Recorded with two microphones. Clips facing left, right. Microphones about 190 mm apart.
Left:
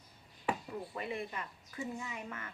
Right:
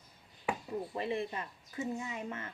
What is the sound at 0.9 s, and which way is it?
A woman's voice, 25° right (ahead or behind).